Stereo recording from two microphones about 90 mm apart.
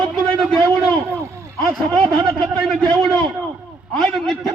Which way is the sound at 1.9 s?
5° left (ahead or behind).